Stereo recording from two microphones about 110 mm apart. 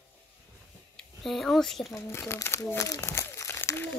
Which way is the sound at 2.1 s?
25° left (ahead or behind).